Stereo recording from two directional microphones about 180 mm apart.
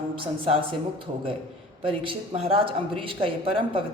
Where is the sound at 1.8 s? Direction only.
30° right (ahead or behind).